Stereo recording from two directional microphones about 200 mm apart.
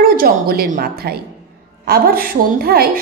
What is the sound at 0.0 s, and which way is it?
A woman's voice, 45° right (ahead or behind).